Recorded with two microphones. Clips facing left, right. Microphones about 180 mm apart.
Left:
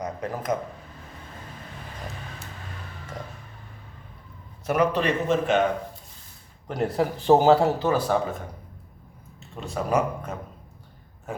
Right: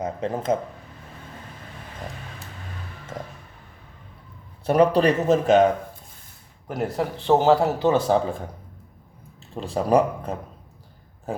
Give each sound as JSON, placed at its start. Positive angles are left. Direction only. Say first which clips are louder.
{"t": 0.0, "sound": "speech", "louder": "right 4 dB", "side_deg": -25}
{"t": 4.6, "sound": "speech", "louder": "right 5 dB", "side_deg": -30}
{"t": 6.7, "sound": "a man's voice", "louder": "left 1 dB", "side_deg": 0}
{"t": 7.8, "sound": "speech", "louder": "right 3 dB", "side_deg": -20}
{"t": 9.6, "sound": "speech", "louder": "right 5 dB", "side_deg": -30}